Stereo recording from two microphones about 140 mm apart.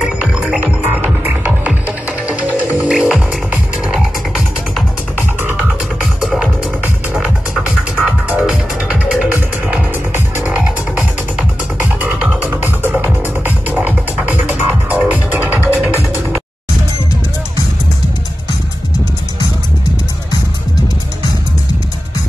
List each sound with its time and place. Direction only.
0.0 s music: 5° right (ahead or behind)
7.9 s music: 10° right (ahead or behind)
10.1 s music: 10° right (ahead or behind)
15.9 s music: 20° left (ahead or behind)